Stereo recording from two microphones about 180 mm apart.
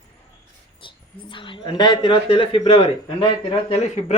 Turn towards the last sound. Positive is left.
turn(degrees=35)  # may be behind; listen again after turning